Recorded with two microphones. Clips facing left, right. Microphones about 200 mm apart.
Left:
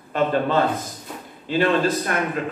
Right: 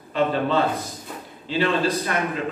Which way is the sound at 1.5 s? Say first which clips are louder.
Left 2 dB; 50° left (ahead or behind).